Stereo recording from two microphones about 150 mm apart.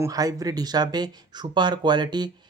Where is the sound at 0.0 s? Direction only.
25° right (ahead or behind).